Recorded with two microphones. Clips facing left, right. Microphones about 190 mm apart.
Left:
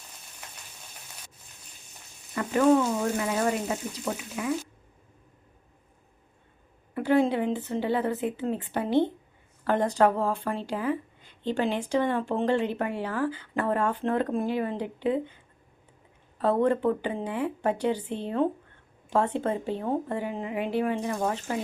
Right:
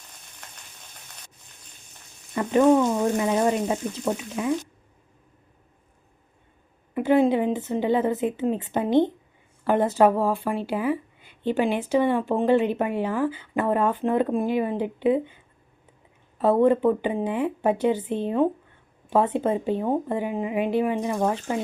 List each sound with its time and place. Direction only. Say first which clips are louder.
2.3 s speech: right 3 dB; 25° right (ahead or behind)
6.9 s speech: right 4 dB; 15° right (ahead or behind)
16.4 s speech: right 5 dB; 15° right (ahead or behind)